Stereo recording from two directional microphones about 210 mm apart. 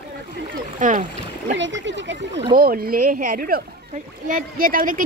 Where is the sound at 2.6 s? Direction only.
45° right (ahead or behind).